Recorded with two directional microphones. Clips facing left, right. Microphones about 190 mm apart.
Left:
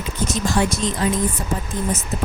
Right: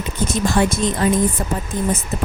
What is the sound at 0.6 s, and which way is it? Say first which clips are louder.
Speech: right 3 dB; 50° right (ahead or behind).